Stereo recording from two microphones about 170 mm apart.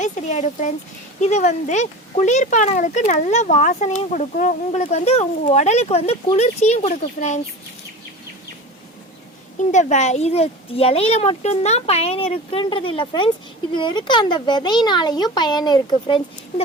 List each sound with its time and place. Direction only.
0.0 s speech: 45° left (ahead or behind)
9.7 s speech: 45° left (ahead or behind); by 16.2 s 25° left (ahead or behind)